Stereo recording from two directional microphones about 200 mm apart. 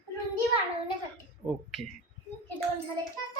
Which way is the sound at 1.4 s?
5° right (ahead or behind).